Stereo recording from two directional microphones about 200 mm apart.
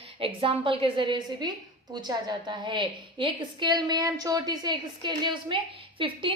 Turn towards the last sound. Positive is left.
turn(degrees=-25)  # may be behind; listen again after turning